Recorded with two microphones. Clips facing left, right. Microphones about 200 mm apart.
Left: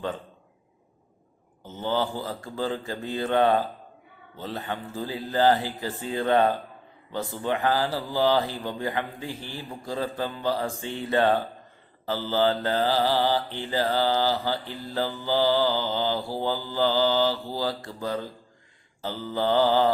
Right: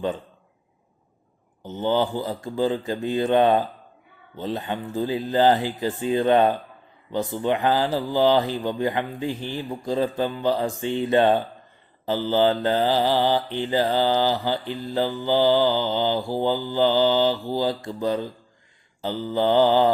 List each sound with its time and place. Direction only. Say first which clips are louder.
1.6 s mantra: right 5 dB; 20° right (ahead or behind)
4.4 s speech: right 5 dB; 20° right (ahead or behind)
12.0 s mantra: right 4 dB; 20° right (ahead or behind)